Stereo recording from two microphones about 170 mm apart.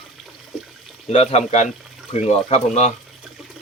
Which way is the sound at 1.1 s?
40° left (ahead or behind).